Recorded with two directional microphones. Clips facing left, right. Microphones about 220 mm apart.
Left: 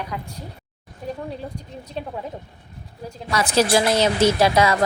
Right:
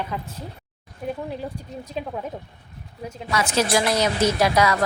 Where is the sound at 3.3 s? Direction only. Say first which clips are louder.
Left 3 dB; 35° left (ahead or behind).